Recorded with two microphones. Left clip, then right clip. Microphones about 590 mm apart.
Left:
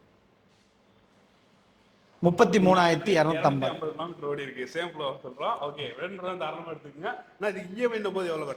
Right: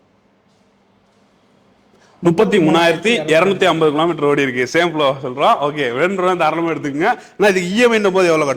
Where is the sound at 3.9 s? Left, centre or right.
Right.